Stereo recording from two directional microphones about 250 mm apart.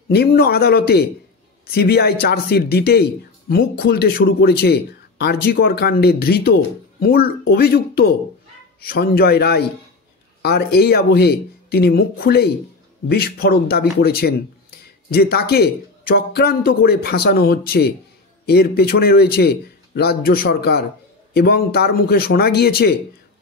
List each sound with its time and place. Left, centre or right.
0.1 s speech: left